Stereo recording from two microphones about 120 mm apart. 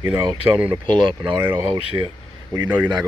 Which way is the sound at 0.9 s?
45° right (ahead or behind).